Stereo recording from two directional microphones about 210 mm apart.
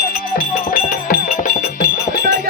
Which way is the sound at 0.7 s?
40° left (ahead or behind).